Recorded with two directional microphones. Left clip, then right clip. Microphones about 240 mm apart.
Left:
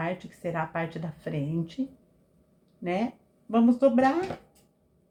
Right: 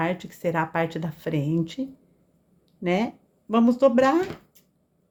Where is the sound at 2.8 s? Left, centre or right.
Right.